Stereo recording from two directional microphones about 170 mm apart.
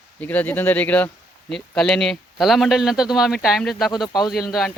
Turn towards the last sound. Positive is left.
turn(degrees=0)  # may be behind; listen again after turning